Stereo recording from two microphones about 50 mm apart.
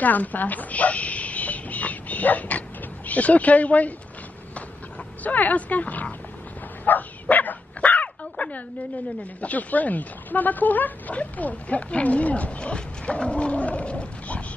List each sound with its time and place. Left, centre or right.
0.0 s a sound: left
3.1 s speech: left
5.2 s speech: left
6.8 s bow-wow: left
9.4 s speech: left